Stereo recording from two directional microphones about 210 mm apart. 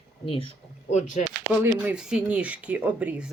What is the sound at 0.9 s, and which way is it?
Speech, 35° left (ahead or behind).